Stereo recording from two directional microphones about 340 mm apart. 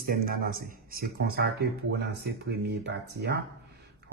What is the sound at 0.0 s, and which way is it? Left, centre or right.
Speech, right.